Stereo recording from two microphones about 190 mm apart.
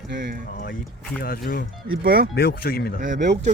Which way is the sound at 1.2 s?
50° left (ahead or behind).